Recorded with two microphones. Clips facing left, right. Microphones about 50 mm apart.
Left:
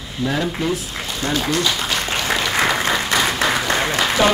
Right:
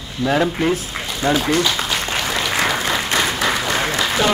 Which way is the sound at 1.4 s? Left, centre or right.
Centre.